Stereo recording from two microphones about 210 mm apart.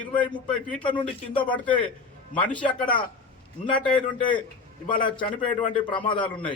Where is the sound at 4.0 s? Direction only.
25° left (ahead or behind).